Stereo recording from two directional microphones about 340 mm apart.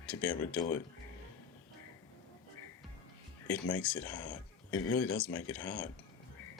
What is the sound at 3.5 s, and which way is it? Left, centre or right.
Speech, centre.